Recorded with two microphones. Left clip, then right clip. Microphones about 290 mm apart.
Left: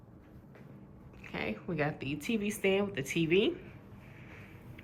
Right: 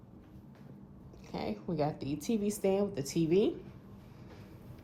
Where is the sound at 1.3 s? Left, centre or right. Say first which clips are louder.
Even; centre.